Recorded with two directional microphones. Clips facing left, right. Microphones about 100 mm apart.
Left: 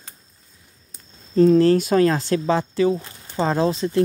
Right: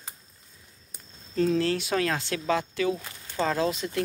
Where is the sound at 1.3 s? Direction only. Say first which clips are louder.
Left 10 dB; 35° left (ahead or behind).